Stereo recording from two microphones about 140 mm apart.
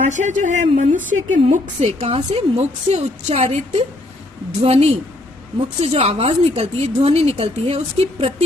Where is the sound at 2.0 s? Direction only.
40° right (ahead or behind).